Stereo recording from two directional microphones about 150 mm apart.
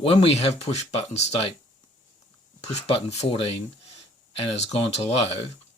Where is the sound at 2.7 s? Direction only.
45° left (ahead or behind).